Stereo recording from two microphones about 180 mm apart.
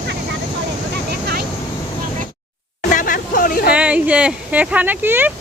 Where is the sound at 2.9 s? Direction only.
50° left (ahead or behind).